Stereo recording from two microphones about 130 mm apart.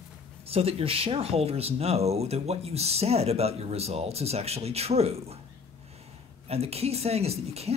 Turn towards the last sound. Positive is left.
turn(degrees=-55)  # may be behind; listen again after turning